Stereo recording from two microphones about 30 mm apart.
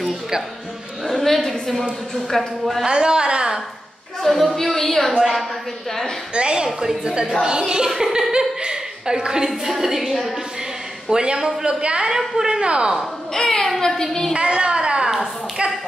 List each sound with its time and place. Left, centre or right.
1.2 s a woman's voice: centre
2.9 s a woman's voice: right
4.2 s speech: centre
5.1 s a woman's voice: centre
6.3 s a woman's voice: right
9.8 s a woman's voice: centre
11.1 s a woman's voice: right
12.1 s a woman's voice: centre
12.4 s a woman's voice: right
13.3 s a woman's voice: left
14.3 s a woman's voice: right
15.0 s a sound: right